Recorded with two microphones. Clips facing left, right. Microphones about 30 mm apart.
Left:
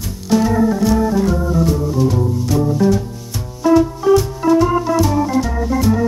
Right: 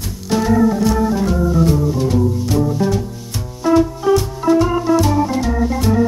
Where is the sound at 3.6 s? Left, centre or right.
Centre.